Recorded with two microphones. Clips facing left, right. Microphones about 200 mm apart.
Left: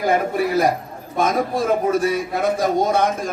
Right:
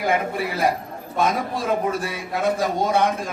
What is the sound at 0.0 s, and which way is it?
A man's voice, 40° left (ahead or behind).